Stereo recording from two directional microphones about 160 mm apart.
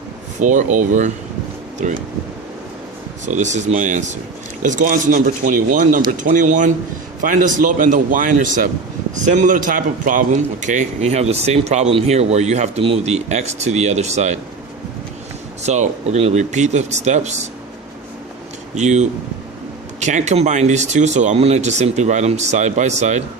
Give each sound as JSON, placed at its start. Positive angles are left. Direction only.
{"t": 0.3, "sound": "speech", "side_deg": -50}
{"t": 3.2, "sound": "a man's voice", "side_deg": -50}
{"t": 15.6, "sound": "speech", "side_deg": -45}
{"t": 18.7, "sound": "speech", "side_deg": -45}